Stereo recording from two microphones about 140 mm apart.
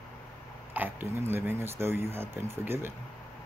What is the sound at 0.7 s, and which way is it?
Speech, 15° right (ahead or behind).